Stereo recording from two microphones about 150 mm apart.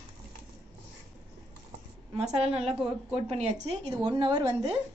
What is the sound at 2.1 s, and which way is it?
A woman's voice, 45° right (ahead or behind).